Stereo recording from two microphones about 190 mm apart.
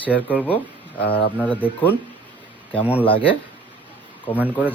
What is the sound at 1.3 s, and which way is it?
Speech, 10° left (ahead or behind).